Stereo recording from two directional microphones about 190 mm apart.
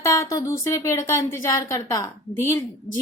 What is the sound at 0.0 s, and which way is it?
A woman's voice, 15° left (ahead or behind).